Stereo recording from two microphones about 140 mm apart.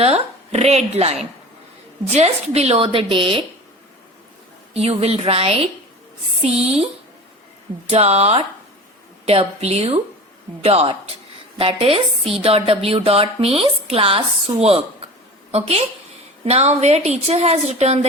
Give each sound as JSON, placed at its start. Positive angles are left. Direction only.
{"t": 0.0, "sound": "a woman's voice", "side_deg": -45}
{"t": 2.1, "sound": "speech", "side_deg": -50}
{"t": 4.7, "sound": "speech", "side_deg": -45}
{"t": 7.9, "sound": "speech", "side_deg": -50}